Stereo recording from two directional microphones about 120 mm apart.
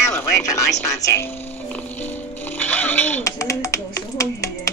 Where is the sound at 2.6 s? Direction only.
15° left (ahead or behind).